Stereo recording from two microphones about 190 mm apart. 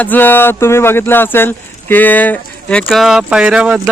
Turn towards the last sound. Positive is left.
turn(degrees=-5)  # may be behind; listen again after turning